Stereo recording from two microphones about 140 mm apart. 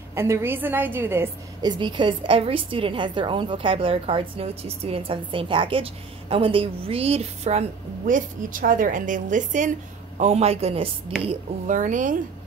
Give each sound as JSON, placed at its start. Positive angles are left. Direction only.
{"t": 0.1, "sound": "a woman's voice", "side_deg": -20}
{"t": 1.6, "sound": "a woman's voice", "side_deg": -35}
{"t": 8.1, "sound": "a woman's voice", "side_deg": -75}
{"t": 10.1, "sound": "a woman's voice", "side_deg": -50}
{"t": 11.6, "sound": "a woman's voice", "side_deg": -65}